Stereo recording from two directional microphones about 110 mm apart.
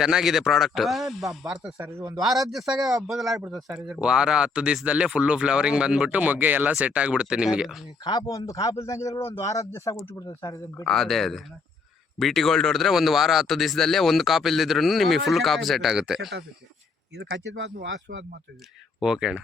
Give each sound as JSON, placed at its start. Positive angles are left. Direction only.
{"t": 0.0, "sound": "speech", "side_deg": -5}
{"t": 8.0, "sound": "a man's voice", "side_deg": 35}
{"t": 10.8, "sound": "speech", "side_deg": 0}
{"t": 18.9, "sound": "speech", "side_deg": -5}